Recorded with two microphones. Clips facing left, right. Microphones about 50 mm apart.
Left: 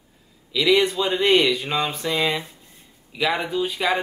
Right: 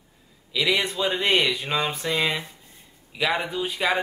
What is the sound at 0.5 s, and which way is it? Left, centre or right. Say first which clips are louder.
A man's voice: left 5 dB; centre.